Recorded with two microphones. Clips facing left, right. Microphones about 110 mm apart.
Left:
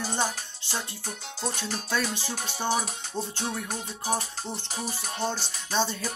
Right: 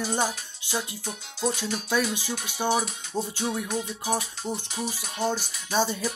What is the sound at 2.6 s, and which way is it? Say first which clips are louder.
Speech: right 3 dB; 10° right (ahead or behind).